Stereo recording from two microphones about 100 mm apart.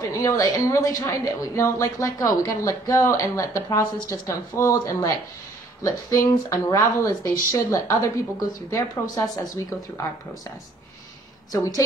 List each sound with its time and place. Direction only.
0.1 s a woman's voice: 30° left (ahead or behind)
11.5 s a woman's voice: 35° left (ahead or behind)